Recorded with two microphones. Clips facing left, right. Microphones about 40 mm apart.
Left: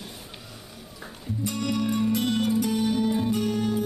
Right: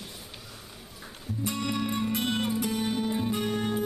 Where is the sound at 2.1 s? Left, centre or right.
Right.